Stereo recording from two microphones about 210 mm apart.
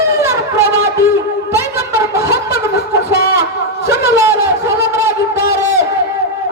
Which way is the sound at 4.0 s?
15° right (ahead or behind).